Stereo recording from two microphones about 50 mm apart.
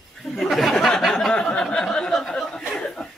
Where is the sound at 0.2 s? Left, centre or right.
Centre.